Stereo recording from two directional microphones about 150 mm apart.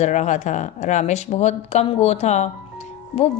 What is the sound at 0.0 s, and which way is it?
Speech, 50° left (ahead or behind).